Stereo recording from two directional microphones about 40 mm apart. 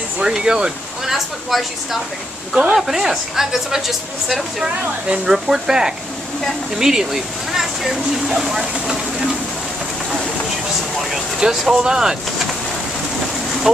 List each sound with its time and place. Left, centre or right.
0.2 s a woman's voice: centre
2.5 s speech: right
2.8 s a woman's voice: centre
11.0 s a woman's voice: centre